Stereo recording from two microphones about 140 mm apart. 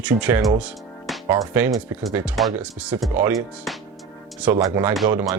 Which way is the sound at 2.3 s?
5° right (ahead or behind).